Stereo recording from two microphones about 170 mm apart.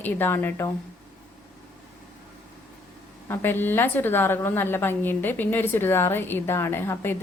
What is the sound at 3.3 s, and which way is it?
A woman's voice, 10° left (ahead or behind).